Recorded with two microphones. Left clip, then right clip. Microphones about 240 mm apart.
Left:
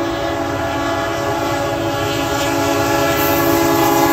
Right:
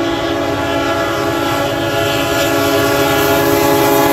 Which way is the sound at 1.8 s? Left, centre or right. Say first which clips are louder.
Right 4 dB; right.